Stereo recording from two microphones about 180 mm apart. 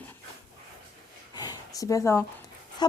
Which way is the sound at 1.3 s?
20° left (ahead or behind).